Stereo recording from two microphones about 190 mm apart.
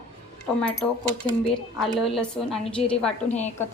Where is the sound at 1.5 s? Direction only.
Centre (ahead or behind).